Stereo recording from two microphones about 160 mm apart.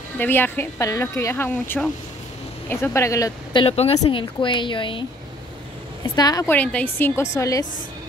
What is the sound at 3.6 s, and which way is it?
Speech, 40° left (ahead or behind).